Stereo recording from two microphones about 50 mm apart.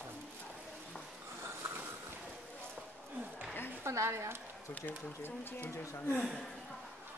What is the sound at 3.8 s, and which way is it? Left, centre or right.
Speech, right.